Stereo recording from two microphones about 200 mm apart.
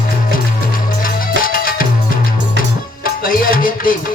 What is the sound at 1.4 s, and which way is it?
Music, 45° left (ahead or behind).